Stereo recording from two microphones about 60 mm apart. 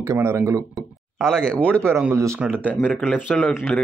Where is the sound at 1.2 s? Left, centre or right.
Centre.